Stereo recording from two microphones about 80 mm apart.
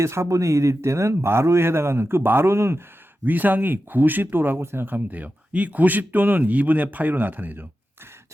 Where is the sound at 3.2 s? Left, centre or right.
Right.